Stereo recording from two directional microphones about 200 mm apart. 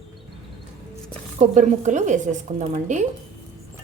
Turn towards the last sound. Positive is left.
turn(degrees=-35)  # may be behind; listen again after turning